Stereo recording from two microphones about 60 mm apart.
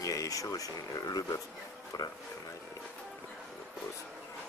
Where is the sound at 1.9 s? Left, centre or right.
Left.